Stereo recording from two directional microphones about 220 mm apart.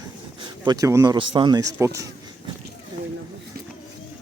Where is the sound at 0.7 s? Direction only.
15° right (ahead or behind).